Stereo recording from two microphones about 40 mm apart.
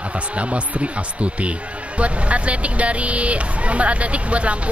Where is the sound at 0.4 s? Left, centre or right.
Right.